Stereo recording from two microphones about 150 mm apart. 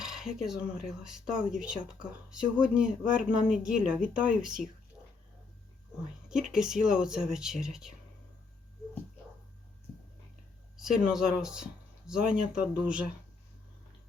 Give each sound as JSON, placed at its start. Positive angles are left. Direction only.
{"t": 0.0, "sound": "speech", "side_deg": -5}
{"t": 6.2, "sound": "speech", "side_deg": -5}
{"t": 10.8, "sound": "speech", "side_deg": -5}